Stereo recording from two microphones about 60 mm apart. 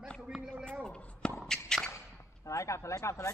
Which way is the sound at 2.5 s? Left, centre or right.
Left.